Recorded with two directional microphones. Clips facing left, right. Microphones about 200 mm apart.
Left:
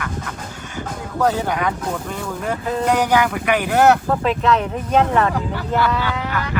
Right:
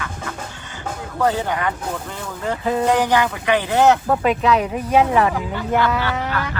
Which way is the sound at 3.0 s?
10° left (ahead or behind).